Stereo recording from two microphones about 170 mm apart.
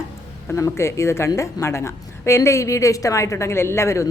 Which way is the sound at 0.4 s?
15° left (ahead or behind).